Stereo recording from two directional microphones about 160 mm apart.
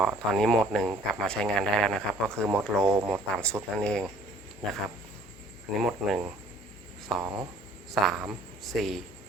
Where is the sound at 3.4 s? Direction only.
5° left (ahead or behind).